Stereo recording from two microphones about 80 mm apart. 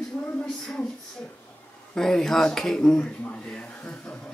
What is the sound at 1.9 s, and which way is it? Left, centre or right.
Speech, centre.